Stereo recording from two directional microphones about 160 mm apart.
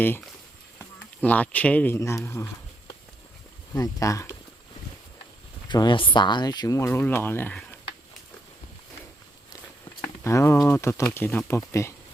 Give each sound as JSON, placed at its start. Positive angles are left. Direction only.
{"t": 0.8, "sound": "speech", "side_deg": 10}
{"t": 3.8, "sound": "speech", "side_deg": 20}
{"t": 5.6, "sound": "speech", "side_deg": 30}
{"t": 10.0, "sound": "a sound", "side_deg": 15}
{"t": 10.6, "sound": "speech", "side_deg": 15}